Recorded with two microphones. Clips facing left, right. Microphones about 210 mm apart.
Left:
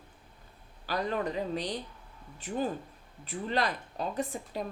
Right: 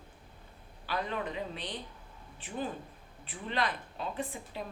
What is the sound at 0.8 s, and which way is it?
Speech, 40° left (ahead or behind).